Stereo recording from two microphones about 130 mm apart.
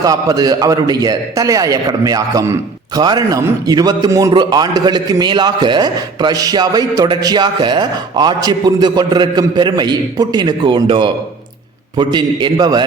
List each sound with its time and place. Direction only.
0.0 s a man's voice: 25° right (ahead or behind)